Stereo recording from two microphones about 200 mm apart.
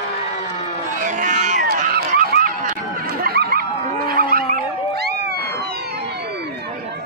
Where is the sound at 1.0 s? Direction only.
40° right (ahead or behind).